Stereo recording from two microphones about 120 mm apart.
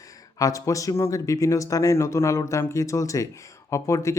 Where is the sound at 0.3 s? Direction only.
30° left (ahead or behind).